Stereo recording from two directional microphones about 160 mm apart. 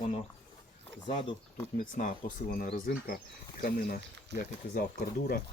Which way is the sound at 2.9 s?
70° left (ahead or behind).